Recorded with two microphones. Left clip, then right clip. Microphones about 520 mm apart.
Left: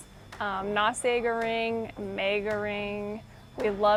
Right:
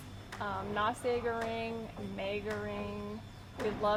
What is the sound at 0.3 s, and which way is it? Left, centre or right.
A woman's voice, left.